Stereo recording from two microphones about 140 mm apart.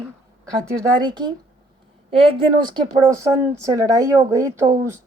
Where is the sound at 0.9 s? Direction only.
30° right (ahead or behind).